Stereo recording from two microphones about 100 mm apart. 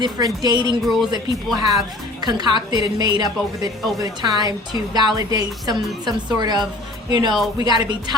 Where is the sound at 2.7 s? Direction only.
45° right (ahead or behind).